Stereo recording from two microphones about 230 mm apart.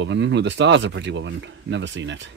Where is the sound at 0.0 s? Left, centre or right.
Right.